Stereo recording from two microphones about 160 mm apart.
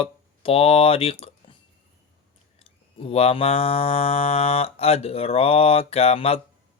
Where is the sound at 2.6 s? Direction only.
35° left (ahead or behind).